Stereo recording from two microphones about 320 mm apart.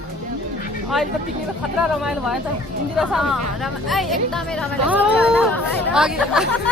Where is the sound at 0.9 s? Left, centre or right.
Centre.